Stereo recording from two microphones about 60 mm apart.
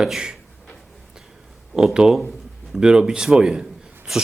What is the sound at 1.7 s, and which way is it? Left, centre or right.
A man's voice, centre.